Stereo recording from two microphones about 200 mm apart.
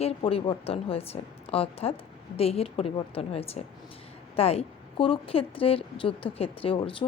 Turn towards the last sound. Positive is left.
turn(degrees=25)  # may be behind; listen again after turning